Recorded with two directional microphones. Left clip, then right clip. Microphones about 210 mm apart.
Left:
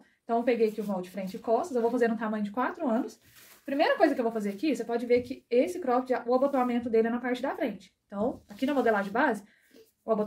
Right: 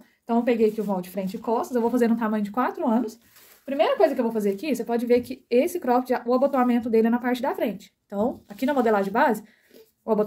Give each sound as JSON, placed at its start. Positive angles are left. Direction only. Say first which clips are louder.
{"t": 0.3, "sound": "a woman's voice", "louder": "right 4 dB", "side_deg": -50}
{"t": 3.6, "sound": "a woman's voice", "louder": "right 4 dB", "side_deg": -40}